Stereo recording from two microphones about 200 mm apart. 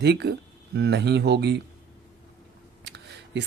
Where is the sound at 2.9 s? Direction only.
60° right (ahead or behind).